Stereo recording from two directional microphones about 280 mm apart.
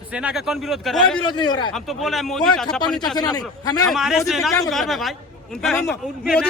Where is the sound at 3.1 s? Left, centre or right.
Centre.